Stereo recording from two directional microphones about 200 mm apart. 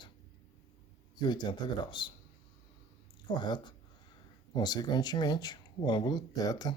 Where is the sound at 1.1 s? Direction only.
20° left (ahead or behind).